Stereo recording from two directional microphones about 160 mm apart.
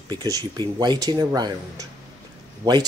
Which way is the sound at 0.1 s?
25° right (ahead or behind).